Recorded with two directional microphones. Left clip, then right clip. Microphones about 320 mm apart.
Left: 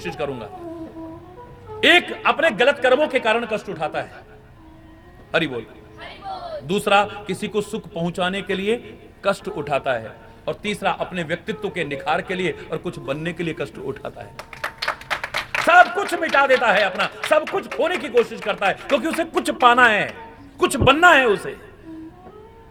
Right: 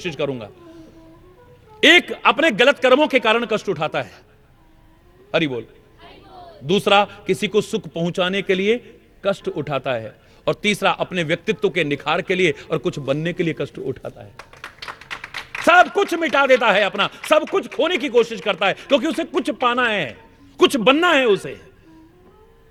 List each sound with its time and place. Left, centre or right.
0.0 s a man's voice: right
1.8 s speech: right
6.7 s a man's voice: right
10.4 s speech: right; by 14.3 s centre
15.6 s a man's voice: right